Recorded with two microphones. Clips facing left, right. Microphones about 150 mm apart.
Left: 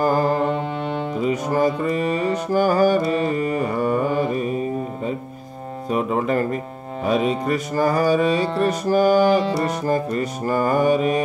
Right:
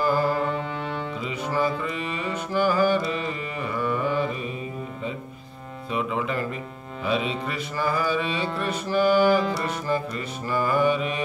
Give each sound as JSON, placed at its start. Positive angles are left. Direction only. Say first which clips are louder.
{"t": 0.0, "sound": "music", "louder": "left 4 dB", "side_deg": 45}
{"t": 1.1, "sound": "music", "louder": "left 8 dB", "side_deg": 45}